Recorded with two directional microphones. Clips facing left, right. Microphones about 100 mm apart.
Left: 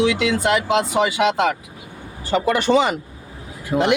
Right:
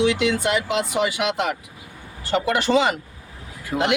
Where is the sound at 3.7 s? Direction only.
10° left (ahead or behind).